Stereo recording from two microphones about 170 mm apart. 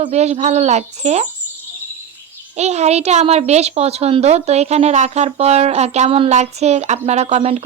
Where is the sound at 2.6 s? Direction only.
40° right (ahead or behind).